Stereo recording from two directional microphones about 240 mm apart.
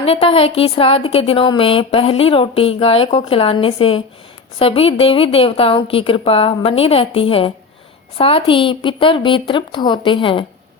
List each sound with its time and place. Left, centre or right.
0.0 s a woman's voice: left